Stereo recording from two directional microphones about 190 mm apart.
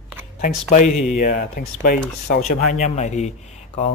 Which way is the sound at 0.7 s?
45° left (ahead or behind).